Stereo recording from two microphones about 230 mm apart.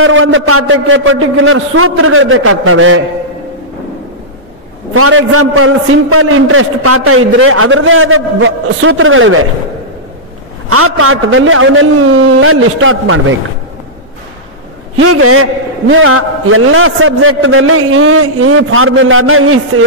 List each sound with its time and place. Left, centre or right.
0.0 s a man's voice: right
4.9 s a man's voice: right
10.7 s a man's voice: right
15.0 s a man's voice: right